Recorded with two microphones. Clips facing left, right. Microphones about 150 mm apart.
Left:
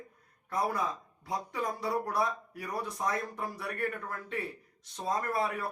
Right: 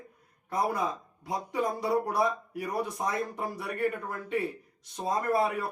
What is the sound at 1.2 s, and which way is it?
Speech, 20° right (ahead or behind).